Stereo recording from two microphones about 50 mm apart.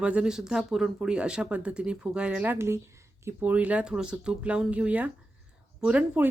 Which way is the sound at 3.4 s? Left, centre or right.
Right.